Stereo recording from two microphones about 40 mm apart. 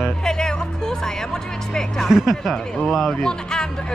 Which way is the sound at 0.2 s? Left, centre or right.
Centre.